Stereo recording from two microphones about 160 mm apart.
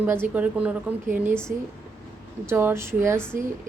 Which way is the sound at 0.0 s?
10° right (ahead or behind).